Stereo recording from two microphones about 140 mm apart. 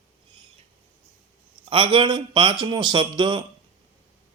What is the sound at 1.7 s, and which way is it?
A man's voice, 40° right (ahead or behind).